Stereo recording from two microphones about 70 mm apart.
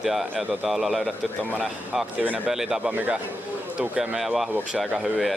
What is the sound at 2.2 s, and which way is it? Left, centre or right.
Speech, right.